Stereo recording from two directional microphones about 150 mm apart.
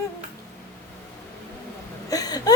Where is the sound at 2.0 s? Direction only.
25° left (ahead or behind).